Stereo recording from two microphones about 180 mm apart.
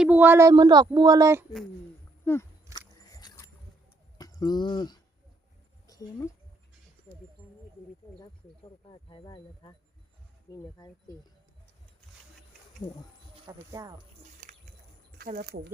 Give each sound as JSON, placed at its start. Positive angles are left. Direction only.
{"t": 0.0, "sound": "speech", "side_deg": -10}
{"t": 2.2, "sound": "speech", "side_deg": 15}
{"t": 2.7, "sound": "a sound", "side_deg": -15}
{"t": 3.1, "sound": "music", "side_deg": 20}
{"t": 4.2, "sound": "speech", "side_deg": 20}
{"t": 8.2, "sound": "speech", "side_deg": 25}
{"t": 12.8, "sound": "speech", "side_deg": 10}
{"t": 13.7, "sound": "speech", "side_deg": -20}
{"t": 15.2, "sound": "speech", "side_deg": -55}